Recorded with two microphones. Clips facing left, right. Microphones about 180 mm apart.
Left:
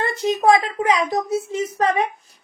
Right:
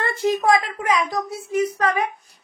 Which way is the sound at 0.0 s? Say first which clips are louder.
Left 2 dB; 20° left (ahead or behind).